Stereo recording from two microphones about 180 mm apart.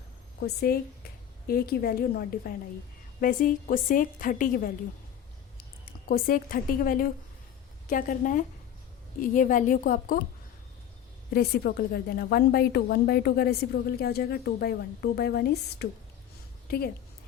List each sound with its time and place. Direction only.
0.3 s a woman's voice: 60° left (ahead or behind)
5.8 s a woman's voice: 55° left (ahead or behind)
11.3 s a woman's voice: 60° left (ahead or behind)